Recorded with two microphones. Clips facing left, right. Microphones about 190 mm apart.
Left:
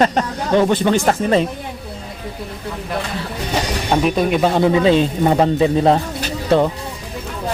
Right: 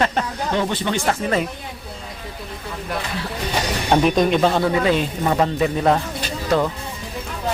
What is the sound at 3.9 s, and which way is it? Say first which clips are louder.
Speech: even; centre (ahead or behind).